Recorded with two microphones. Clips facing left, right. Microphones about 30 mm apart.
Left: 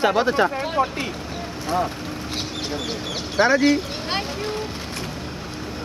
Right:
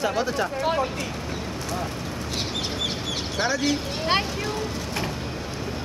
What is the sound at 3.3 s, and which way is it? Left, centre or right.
Speech, left.